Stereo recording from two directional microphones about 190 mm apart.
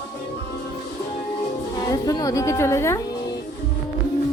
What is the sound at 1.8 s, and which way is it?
A woman's voice, 20° left (ahead or behind).